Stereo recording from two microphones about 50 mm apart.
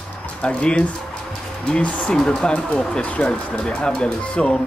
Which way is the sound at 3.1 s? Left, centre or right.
Left.